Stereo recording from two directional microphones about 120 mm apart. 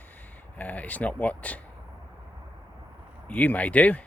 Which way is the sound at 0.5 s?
15° left (ahead or behind).